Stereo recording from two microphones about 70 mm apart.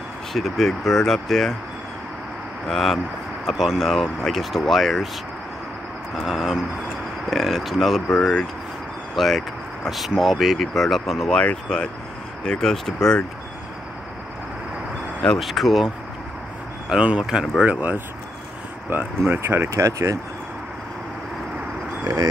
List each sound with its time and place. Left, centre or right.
0.3 s speech: centre
2.7 s speech: centre
6.1 s speech: centre
8.2 s speech: centre
9.1 s speech: centre
11.3 s speech: centre
15.3 s speech: centre
16.9 s speech: centre
17.6 s speech: right
19.7 s speech: right
22.0 s speech: right